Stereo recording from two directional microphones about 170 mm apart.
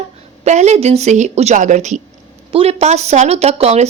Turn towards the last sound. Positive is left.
turn(degrees=-40)  # may be behind; listen again after turning